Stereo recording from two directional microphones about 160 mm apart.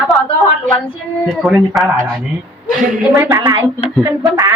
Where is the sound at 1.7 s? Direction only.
Centre (ahead or behind).